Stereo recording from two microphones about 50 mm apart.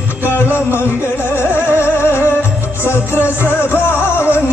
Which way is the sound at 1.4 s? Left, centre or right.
Left.